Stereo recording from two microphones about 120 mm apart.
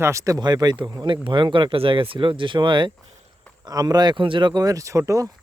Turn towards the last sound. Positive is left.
turn(degrees=-25)  # may be behind; listen again after turning